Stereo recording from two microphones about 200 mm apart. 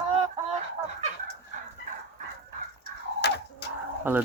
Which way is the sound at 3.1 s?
55° left (ahead or behind).